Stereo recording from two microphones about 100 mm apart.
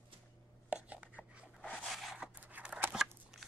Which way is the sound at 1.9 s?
Centre (ahead or behind).